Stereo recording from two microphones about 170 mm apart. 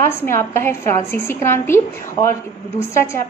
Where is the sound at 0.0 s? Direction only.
15° left (ahead or behind).